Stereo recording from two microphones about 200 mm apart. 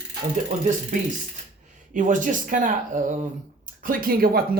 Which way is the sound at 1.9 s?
40° right (ahead or behind).